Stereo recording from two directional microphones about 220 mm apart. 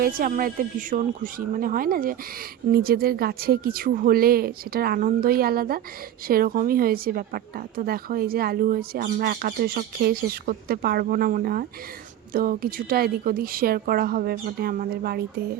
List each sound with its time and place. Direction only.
0.0 s a woman's voice: 40° right (ahead or behind)